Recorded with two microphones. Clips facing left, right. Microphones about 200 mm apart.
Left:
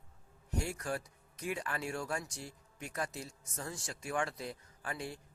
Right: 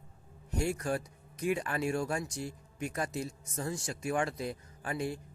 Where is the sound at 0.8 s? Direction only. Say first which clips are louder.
Right 5 dB; 20° right (ahead or behind).